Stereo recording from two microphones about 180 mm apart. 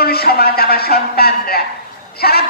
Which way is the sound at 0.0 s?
60° left (ahead or behind).